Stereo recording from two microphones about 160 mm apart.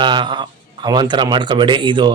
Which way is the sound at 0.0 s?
30° right (ahead or behind).